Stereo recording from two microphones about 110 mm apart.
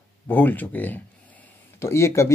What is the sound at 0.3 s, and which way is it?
Speech, 15° left (ahead or behind).